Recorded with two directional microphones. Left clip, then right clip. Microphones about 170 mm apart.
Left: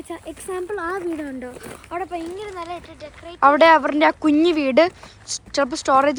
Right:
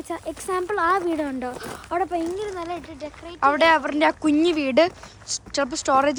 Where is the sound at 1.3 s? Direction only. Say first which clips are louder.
Right 3 dB; 60° right (ahead or behind).